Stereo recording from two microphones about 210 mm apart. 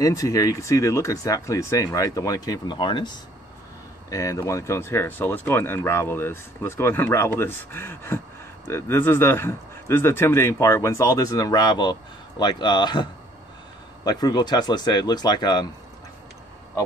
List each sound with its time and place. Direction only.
0.0 s speech: 15° left (ahead or behind)